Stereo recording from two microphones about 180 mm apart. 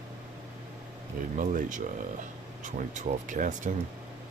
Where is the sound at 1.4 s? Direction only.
45° right (ahead or behind).